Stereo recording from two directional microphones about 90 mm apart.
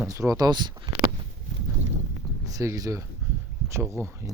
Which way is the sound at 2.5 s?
40° right (ahead or behind).